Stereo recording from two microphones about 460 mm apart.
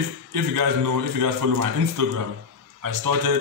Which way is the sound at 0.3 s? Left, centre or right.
Right.